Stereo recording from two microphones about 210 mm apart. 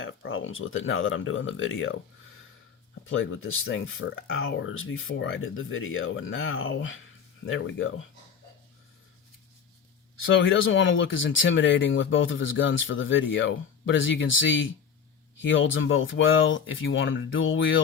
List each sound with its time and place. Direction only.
0.0 s speech: 65° left (ahead or behind)
3.1 s speech: 70° left (ahead or behind)
10.2 s speech: 65° left (ahead or behind)